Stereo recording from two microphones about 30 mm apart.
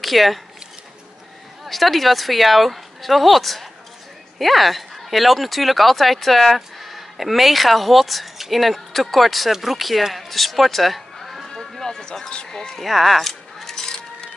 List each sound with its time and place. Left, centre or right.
0.0 s speech: centre
1.6 s speech: centre
11.8 s speech: left
12.4 s speech: centre
12.7 s speech: centre
13.8 s music: centre